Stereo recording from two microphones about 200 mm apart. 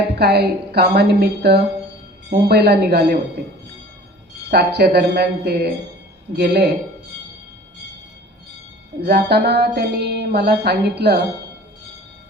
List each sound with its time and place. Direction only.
0.2 s a woman's voice: 55° right (ahead or behind)
2.3 s music: 55° right (ahead or behind)
4.5 s music: 55° right (ahead or behind)
9.0 s music: 50° right (ahead or behind)